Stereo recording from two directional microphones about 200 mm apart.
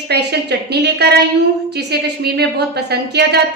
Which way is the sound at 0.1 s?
55° right (ahead or behind).